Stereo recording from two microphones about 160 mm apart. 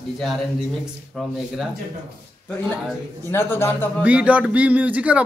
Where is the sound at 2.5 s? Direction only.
10° left (ahead or behind).